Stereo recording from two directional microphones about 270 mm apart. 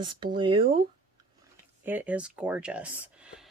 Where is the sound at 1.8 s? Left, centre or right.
Centre.